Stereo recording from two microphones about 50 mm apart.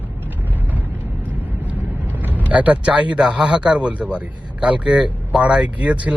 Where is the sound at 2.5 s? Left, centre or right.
Right.